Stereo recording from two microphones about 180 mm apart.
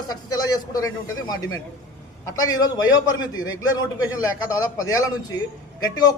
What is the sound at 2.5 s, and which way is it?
A man's voice, 20° left (ahead or behind).